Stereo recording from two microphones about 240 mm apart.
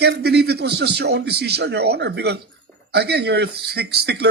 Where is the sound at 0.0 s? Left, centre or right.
Right.